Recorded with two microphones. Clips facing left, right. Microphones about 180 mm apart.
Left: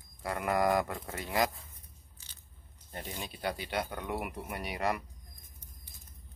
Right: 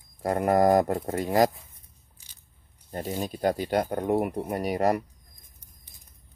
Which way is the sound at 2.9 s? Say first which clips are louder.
Right 11 dB; 40° right (ahead or behind).